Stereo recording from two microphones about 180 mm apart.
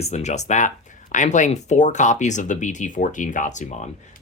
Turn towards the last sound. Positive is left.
turn(degrees=40)  # may be behind; listen again after turning